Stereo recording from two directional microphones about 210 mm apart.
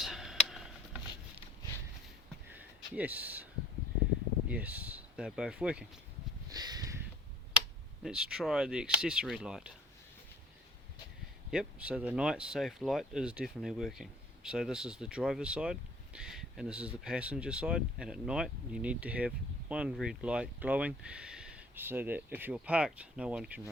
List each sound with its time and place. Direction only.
0.0 s tick: centre (ahead or behind)
2.5 s a sound: 10° right (ahead or behind)
4.4 s speech: 5° right (ahead or behind)
6.5 s a sound: 20° right (ahead or behind)
8.0 s speech: 5° right (ahead or behind)
11.5 s speech: 5° right (ahead or behind)